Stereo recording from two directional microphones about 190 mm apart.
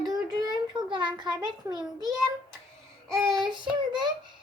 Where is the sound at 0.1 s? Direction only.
20° right (ahead or behind).